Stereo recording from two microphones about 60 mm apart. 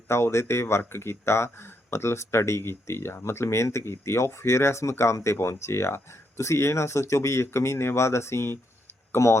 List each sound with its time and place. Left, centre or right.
0.1 s speech: left